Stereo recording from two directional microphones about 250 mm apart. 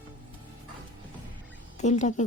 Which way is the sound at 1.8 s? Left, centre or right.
Left.